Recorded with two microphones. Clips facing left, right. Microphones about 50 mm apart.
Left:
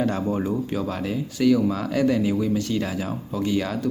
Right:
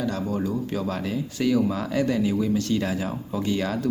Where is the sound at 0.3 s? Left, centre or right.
Left.